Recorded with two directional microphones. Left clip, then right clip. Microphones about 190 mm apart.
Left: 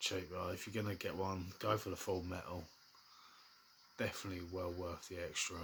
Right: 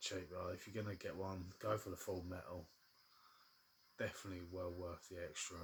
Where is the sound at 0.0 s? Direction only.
20° left (ahead or behind).